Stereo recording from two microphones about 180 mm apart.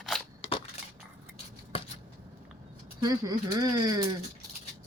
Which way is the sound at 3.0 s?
20° right (ahead or behind).